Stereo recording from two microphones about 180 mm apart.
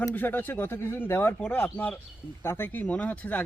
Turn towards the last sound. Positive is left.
turn(degrees=10)  # may be behind; listen again after turning